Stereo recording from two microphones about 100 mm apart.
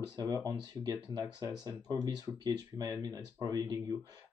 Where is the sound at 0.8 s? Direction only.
40° right (ahead or behind).